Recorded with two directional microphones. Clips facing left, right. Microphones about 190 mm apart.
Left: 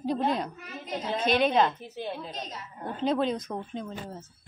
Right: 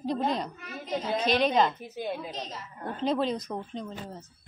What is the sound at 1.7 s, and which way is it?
A woman's voice, 10° right (ahead or behind).